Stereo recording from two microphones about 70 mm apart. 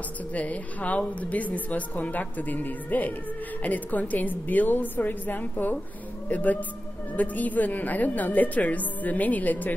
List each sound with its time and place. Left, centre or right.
0.3 s a woman's voice: left